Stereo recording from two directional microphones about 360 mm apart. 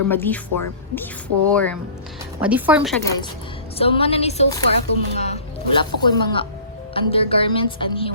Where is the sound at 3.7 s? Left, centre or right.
Centre.